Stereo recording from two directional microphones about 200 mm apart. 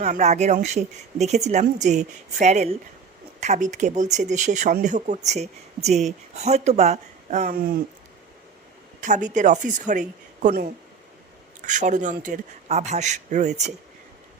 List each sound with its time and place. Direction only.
0.0 s speech: 35° right (ahead or behind)
9.0 s speech: 40° right (ahead or behind)